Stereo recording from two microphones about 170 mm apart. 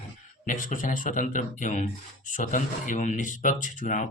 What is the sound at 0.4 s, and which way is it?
Speech, 50° left (ahead or behind).